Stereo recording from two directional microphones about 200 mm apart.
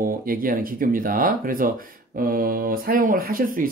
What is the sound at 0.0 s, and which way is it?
Speech, 45° right (ahead or behind).